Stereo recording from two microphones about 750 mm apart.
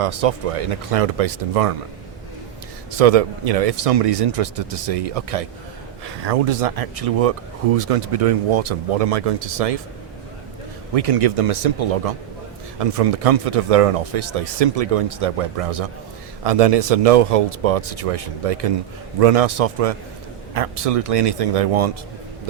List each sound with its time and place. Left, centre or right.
0.0 s speech: right
2.9 s speech: right
10.9 s speech: right